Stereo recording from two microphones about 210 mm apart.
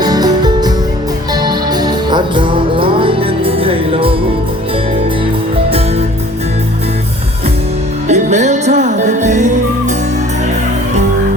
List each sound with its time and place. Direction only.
0.0 s music: 20° right (ahead or behind)
8.0 s music: 35° right (ahead or behind)